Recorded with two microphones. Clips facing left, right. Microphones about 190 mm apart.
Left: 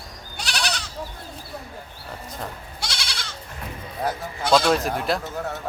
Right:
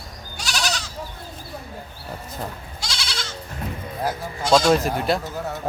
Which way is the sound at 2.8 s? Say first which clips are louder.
Right 2 dB; 55° left (ahead or behind).